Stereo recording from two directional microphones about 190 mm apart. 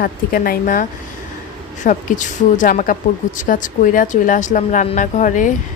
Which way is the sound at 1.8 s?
40° left (ahead or behind).